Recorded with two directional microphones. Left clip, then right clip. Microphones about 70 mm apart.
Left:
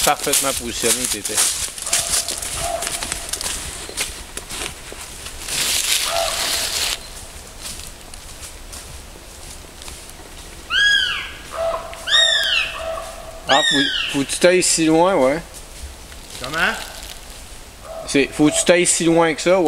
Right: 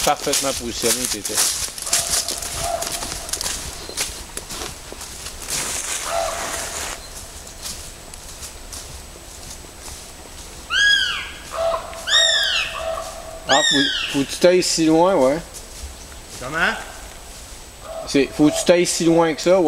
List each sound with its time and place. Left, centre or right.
0.0 s speech: left
0.8 s horse: centre
5.7 s fowl: left
10.7 s cat: centre
11.6 s bird: centre
11.9 s cat: centre
13.7 s speech: centre
14.1 s speech: left
16.4 s speech: centre
18.0 s speech: left